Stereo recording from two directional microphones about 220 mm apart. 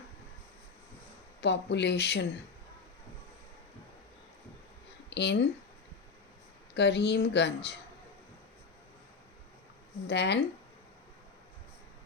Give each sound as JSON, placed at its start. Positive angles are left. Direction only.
{"t": 1.4, "sound": "a woman's voice", "side_deg": 50}
{"t": 5.1, "sound": "a woman's voice", "side_deg": 50}
{"t": 6.7, "sound": "a woman's voice", "side_deg": 50}
{"t": 10.1, "sound": "a woman's voice", "side_deg": 50}